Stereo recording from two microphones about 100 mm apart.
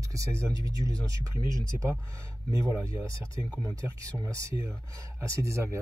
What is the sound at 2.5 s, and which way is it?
Speech, 30° right (ahead or behind).